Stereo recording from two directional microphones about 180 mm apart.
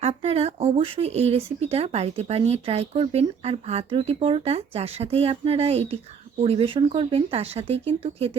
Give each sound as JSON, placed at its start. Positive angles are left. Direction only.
{"t": 0.0, "sound": "speech", "side_deg": -35}